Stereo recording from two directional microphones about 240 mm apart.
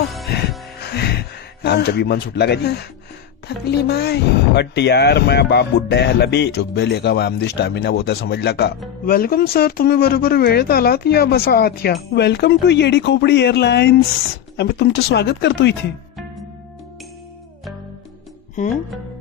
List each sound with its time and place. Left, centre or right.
0.8 s music: left
1.6 s speech: left
18.6 s speech: left